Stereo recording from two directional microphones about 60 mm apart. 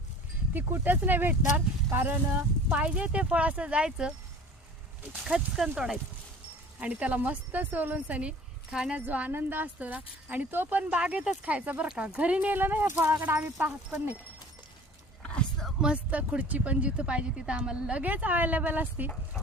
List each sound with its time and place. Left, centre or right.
0.5 s speech: right
2.6 s a woman's voice: centre
5.2 s speech: centre
6.7 s a woman's voice: right
10.9 s a woman's voice: centre; by 13.0 s right
13.1 s a woman's voice: right
15.2 s a sound: centre
16.0 s a woman's voice: right